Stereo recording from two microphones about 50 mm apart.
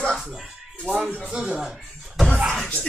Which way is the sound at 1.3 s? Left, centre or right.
Centre.